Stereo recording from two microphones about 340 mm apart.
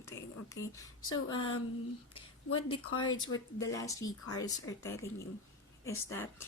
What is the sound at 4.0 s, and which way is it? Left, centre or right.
Speech, left.